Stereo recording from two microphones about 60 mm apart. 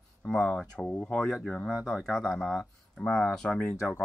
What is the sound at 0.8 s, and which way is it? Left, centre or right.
Speech, left.